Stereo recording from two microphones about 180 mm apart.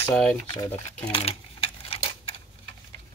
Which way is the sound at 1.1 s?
30° left (ahead or behind).